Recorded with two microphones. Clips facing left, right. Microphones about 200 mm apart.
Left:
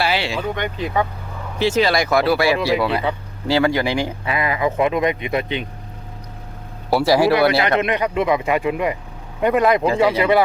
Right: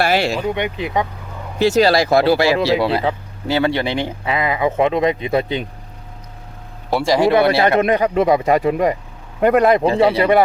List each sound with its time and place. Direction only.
0.0 s speech: 45° right (ahead or behind)
0.5 s speech: 15° right (ahead or behind)
1.5 s speech: 40° right (ahead or behind)
6.9 s speech: 5° left (ahead or behind)
7.3 s speech: 25° right (ahead or behind)
7.8 s speech: 45° right (ahead or behind)
9.4 s speech: 55° right (ahead or behind)
9.7 s speech: 30° right (ahead or behind)